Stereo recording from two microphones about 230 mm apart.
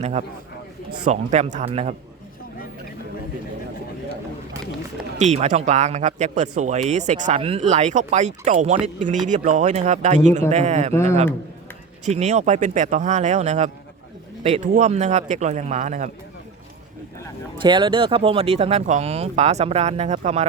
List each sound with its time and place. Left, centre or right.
0.0 s speech: right
5.1 s speech: right
12.0 s speech: right
17.6 s speech: right